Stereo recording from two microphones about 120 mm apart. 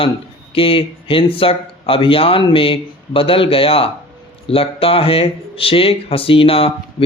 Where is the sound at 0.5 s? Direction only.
50° left (ahead or behind).